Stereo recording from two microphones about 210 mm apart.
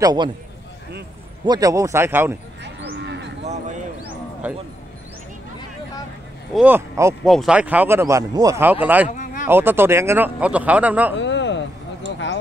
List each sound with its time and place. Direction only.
0.0 s a man's voice: 20° right (ahead or behind)
1.4 s speech: 20° right (ahead or behind)
2.6 s cattle: 55° right (ahead or behind)
4.4 s speech: 10° right (ahead or behind)
6.5 s speech: 10° right (ahead or behind)
9.1 s a sound: 35° left (ahead or behind)
9.5 s speech: 10° right (ahead or behind)
11.1 s a sound: 60° left (ahead or behind)